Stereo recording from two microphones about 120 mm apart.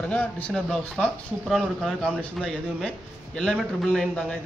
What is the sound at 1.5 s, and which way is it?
Speech, 5° right (ahead or behind).